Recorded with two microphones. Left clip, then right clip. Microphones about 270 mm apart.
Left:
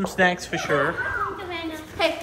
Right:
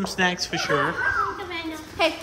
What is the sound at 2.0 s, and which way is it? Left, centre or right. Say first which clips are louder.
Speech: even; right.